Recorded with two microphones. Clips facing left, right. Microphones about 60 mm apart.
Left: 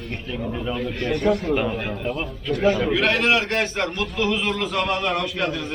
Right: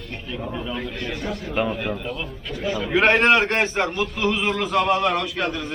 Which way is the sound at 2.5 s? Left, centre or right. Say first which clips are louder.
Left 8 dB; left.